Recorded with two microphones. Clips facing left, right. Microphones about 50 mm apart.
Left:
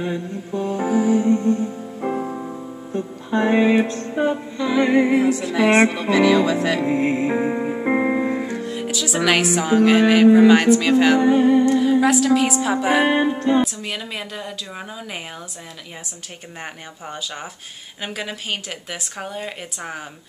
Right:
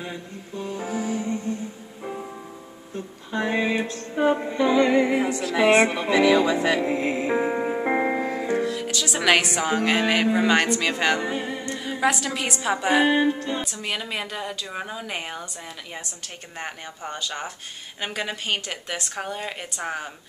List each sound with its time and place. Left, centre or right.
0.6 s speech: centre
1.2 s music: left
3.3 s a sound: left
3.8 s music: left
4.3 s music: right
4.7 s speech: centre
5.1 s speech: centre
7.3 s music: centre
8.2 s music: centre
8.8 s speech: centre
13.1 s a sound: centre
13.6 s speech: centre
16.6 s speech: centre